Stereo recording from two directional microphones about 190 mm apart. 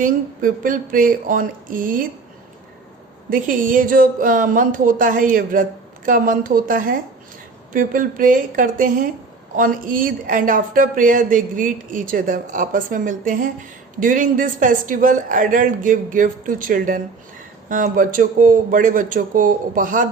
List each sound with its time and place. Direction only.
0.0 s speech: 45° right (ahead or behind)
3.2 s speech: 45° right (ahead or behind)